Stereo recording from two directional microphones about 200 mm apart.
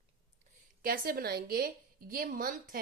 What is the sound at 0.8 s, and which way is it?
A woman's voice, 45° right (ahead or behind).